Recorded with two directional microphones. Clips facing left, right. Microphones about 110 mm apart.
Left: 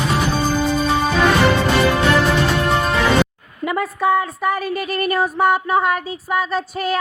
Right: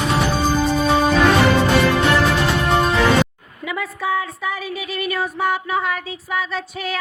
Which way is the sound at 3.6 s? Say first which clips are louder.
Left 6 dB; 50° left (ahead or behind).